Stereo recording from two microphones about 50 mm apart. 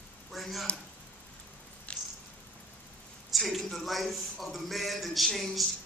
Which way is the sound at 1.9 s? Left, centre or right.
Left.